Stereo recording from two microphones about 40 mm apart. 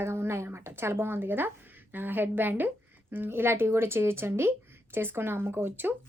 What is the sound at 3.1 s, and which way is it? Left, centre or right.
A woman's voice, right.